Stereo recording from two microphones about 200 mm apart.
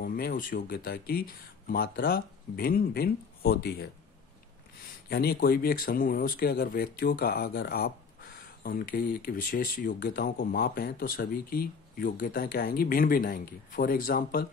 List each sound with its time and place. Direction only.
0.0 s speech: 45° left (ahead or behind)
5.1 s speech: 50° left (ahead or behind)